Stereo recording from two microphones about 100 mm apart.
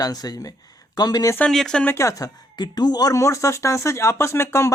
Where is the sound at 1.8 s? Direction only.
30° left (ahead or behind).